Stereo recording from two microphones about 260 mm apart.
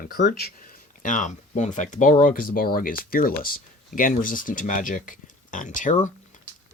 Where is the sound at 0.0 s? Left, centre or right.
Left.